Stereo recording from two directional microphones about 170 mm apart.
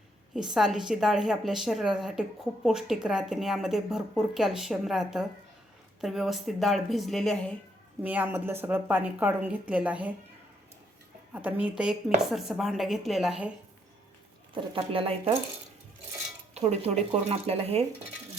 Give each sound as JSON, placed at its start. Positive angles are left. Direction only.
{"t": 0.3, "sound": "a woman's voice", "side_deg": -5}
{"t": 8.0, "sound": "a woman's voice", "side_deg": -10}
{"t": 11.3, "sound": "a woman's voice", "side_deg": -10}
{"t": 14.5, "sound": "speech", "side_deg": -30}
{"t": 16.6, "sound": "speech", "side_deg": -40}